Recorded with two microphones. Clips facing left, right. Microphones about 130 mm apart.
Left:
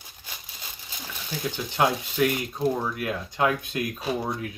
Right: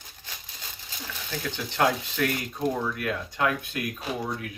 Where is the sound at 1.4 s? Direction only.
15° left (ahead or behind).